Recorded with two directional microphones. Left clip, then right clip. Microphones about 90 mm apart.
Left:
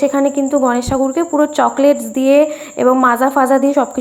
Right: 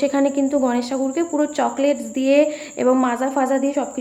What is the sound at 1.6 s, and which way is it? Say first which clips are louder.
A woman's voice: left 7 dB; 30° left (ahead or behind).